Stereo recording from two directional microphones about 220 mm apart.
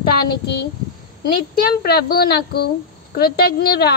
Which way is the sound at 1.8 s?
45° left (ahead or behind).